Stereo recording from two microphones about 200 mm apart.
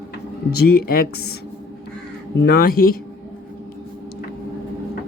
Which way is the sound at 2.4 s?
50° left (ahead or behind).